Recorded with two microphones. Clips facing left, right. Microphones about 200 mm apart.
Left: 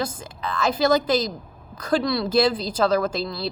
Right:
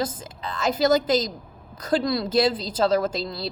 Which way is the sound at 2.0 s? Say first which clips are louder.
Left 1 dB; 45° right (ahead or behind).